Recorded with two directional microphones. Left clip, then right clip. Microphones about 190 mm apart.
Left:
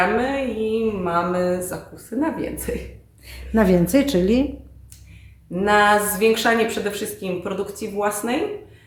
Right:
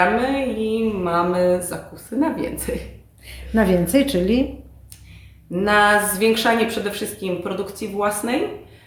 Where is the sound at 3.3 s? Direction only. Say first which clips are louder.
Even; 35° left (ahead or behind).